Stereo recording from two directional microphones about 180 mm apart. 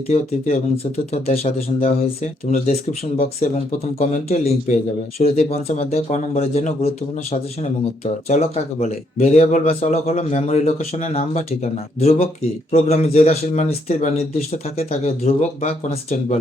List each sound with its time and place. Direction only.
0.9 s speech: 35° left (ahead or behind)